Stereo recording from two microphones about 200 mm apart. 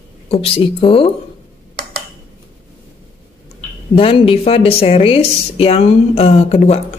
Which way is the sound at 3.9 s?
25° left (ahead or behind).